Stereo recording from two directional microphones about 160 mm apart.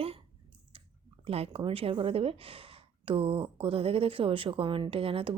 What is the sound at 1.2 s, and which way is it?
Speech, 40° right (ahead or behind).